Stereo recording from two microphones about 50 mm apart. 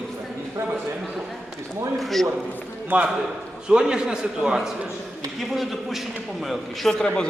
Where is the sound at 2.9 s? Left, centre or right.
Right.